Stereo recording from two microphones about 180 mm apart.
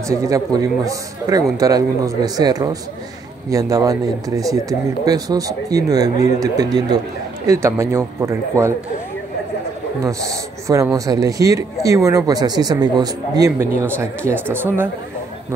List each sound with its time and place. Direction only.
0.1 s a man's voice: 20° right (ahead or behind)
10.0 s a man's voice: 15° right (ahead or behind)